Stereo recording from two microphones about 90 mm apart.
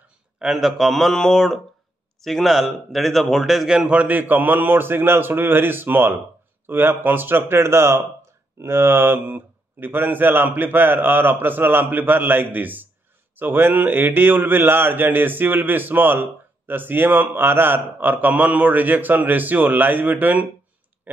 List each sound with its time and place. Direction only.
0.4 s a man's voice: 5° right (ahead or behind); by 20.4 s 20° right (ahead or behind)